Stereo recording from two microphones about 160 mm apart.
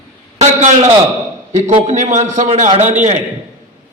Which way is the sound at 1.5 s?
45° right (ahead or behind).